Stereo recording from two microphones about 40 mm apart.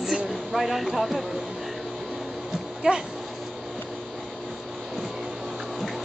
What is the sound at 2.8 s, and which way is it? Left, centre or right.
Speech, right.